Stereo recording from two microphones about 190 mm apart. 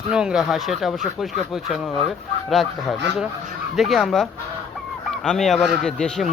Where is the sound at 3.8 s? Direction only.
Centre (ahead or behind).